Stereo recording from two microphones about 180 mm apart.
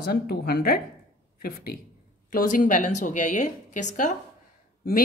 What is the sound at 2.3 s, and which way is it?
A woman's voice, 50° left (ahead or behind).